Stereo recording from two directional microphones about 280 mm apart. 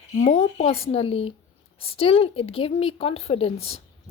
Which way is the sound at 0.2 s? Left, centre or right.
Left.